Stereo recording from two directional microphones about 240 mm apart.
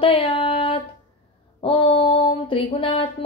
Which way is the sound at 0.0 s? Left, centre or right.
Left.